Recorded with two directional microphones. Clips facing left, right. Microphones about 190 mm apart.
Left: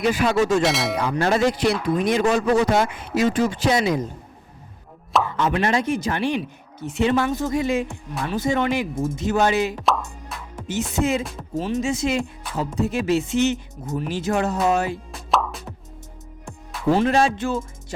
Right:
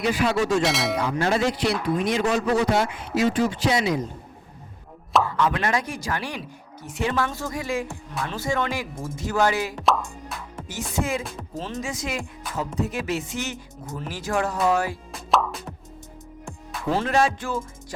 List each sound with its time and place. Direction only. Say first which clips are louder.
0.0 s a man's voice: left 3 dB; 50° left (ahead or behind)
0.6 s speech: left 2 dB; centre (ahead or behind)
1.1 s a man's voice: left 5 dB; 50° left (ahead or behind)
5.2 s speech: left 2 dB; 20° left (ahead or behind)
9.7 s music: even; centre (ahead or behind)
10.7 s speech: left 5 dB; 25° left (ahead or behind)
15.3 s music: even; centre (ahead or behind)
17.1 s speech: left 3 dB; 30° left (ahead or behind)